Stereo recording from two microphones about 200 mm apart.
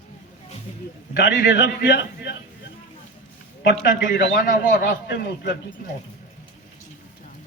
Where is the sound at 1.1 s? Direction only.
65° left (ahead or behind).